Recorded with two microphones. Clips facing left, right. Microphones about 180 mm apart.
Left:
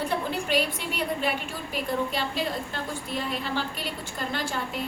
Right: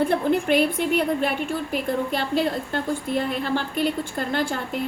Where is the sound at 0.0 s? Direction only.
50° right (ahead or behind).